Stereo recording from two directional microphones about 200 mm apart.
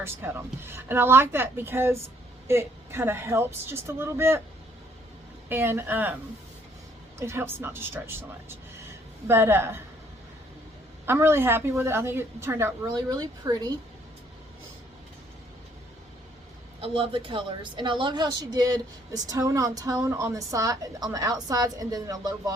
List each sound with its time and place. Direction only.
0.0 s a woman's voice: 10° right (ahead or behind)
5.5 s a woman's voice: 10° right (ahead or behind)
7.2 s a woman's voice: 10° right (ahead or behind)
11.0 s a woman's voice: 10° right (ahead or behind)
16.8 s a woman's voice: 25° right (ahead or behind)